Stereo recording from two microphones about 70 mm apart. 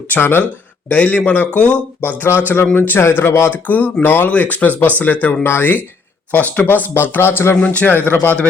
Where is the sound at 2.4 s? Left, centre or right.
Left.